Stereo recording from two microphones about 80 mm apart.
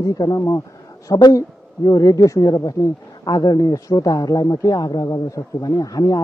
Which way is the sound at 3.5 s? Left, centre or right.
Left.